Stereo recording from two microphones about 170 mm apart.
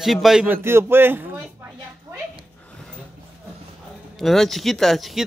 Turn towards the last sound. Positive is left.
turn(degrees=0)  # may be behind; listen again after turning